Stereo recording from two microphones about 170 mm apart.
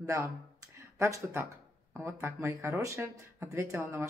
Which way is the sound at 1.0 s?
15° right (ahead or behind).